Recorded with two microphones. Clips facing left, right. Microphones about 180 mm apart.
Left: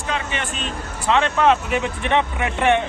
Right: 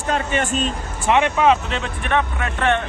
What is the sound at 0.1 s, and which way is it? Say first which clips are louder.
Speech: right 6 dB; 45° right (ahead or behind).